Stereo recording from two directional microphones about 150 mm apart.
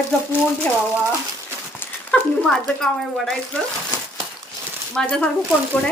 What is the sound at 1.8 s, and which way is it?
Speech, 10° left (ahead or behind).